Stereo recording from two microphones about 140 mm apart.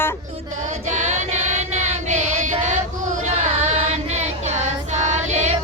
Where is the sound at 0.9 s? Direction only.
55° right (ahead or behind).